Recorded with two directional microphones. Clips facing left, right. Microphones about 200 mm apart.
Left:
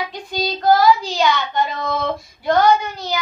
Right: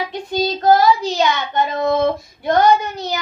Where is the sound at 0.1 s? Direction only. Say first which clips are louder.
Right 4 dB; 25° right (ahead or behind).